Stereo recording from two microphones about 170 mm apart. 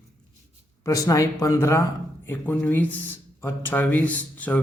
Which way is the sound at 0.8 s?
20° left (ahead or behind).